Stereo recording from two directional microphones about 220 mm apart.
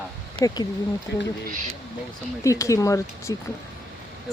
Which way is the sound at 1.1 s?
50° left (ahead or behind).